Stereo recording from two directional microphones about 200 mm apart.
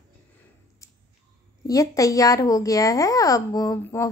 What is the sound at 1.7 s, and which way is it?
Speech, 15° left (ahead or behind).